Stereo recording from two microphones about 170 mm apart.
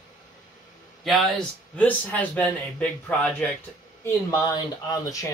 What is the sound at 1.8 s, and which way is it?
Speech, 10° left (ahead or behind).